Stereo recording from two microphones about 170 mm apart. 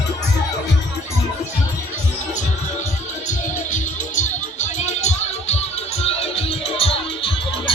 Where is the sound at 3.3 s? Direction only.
45° left (ahead or behind).